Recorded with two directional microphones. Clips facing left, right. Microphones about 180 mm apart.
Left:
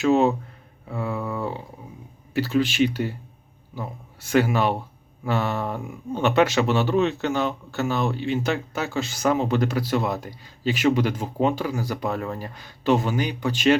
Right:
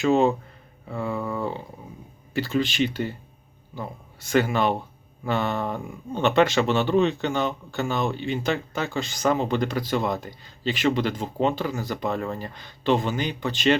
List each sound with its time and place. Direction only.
0.0 s speech: 5° left (ahead or behind)